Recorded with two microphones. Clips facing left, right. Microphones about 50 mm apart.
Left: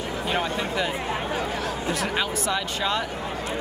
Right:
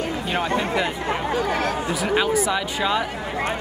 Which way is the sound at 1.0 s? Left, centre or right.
Right.